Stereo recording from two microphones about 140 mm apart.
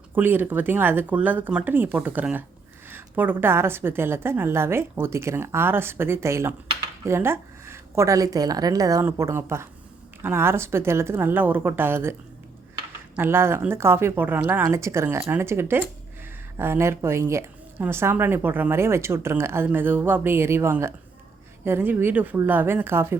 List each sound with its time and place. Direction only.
0.1 s speech: 15° right (ahead or behind)
13.1 s speech: 15° right (ahead or behind)